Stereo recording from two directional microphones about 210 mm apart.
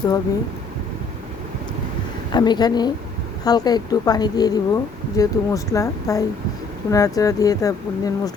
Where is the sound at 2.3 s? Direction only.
20° left (ahead or behind).